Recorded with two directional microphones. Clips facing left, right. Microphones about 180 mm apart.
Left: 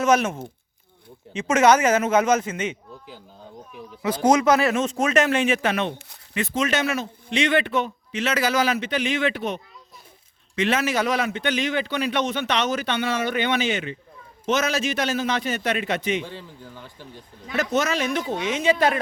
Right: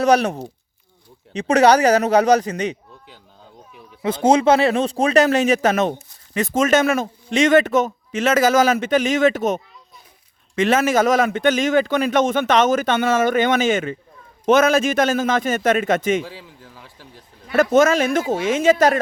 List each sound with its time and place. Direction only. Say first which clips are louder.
0.0 s speech: right 4 dB; 35° right (ahead or behind)
4.0 s a man's voice: right 3 dB; 25° right (ahead or behind); by 16.2 s 45° right (ahead or behind)
16.2 s speech: even; 5° right (ahead or behind)
17.6 s a man's voice: right 9 dB; 50° right (ahead or behind)